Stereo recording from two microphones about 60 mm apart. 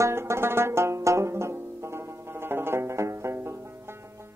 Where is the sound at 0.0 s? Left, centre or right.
Right.